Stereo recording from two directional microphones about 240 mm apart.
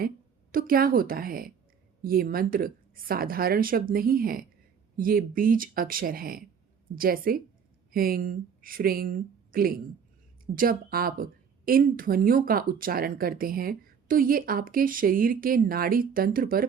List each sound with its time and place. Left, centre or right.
0.5 s a woman's voice: right